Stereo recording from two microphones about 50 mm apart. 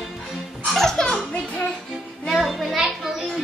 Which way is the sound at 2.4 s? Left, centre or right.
Centre.